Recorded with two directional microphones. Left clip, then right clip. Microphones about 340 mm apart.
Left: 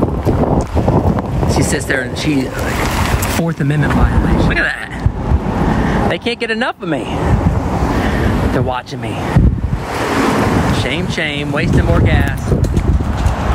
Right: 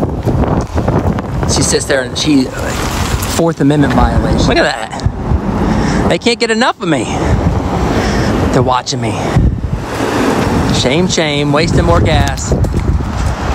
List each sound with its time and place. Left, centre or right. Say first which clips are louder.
1.6 s speech: right 5 dB; centre
6.0 s speech: right 5 dB; centre
10.7 s speech: right 5 dB; centre